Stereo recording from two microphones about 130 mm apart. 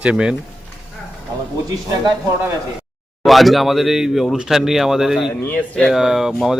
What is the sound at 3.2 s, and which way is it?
A man's voice, centre (ahead or behind).